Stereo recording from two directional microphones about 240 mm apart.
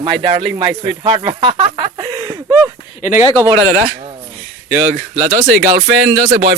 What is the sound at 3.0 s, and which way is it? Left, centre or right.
Speech, left.